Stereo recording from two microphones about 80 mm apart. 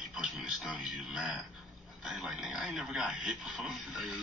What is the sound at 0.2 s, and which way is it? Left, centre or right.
Music, centre.